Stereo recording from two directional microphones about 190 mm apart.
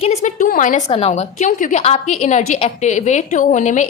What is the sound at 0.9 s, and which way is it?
A woman's voice, 30° left (ahead or behind).